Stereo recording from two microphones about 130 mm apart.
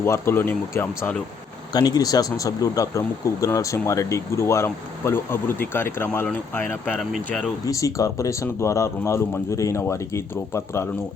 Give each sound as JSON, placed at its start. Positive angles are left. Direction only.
{"t": 0.0, "sound": "speech", "side_deg": 20}
{"t": 1.7, "sound": "speech", "side_deg": 30}
{"t": 7.1, "sound": "speech", "side_deg": 0}
{"t": 7.7, "sound": "speech", "side_deg": 25}